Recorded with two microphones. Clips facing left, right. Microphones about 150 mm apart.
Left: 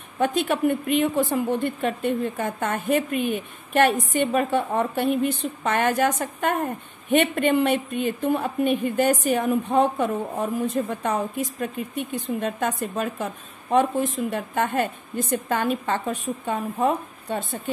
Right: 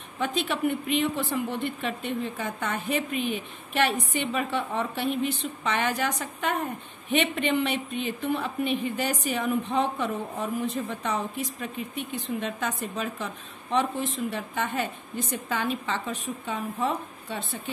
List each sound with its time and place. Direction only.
0.2 s a woman's voice: 50° left (ahead or behind)